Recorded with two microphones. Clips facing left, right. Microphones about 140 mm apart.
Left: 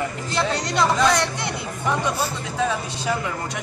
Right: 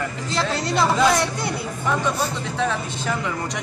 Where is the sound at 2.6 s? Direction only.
10° left (ahead or behind).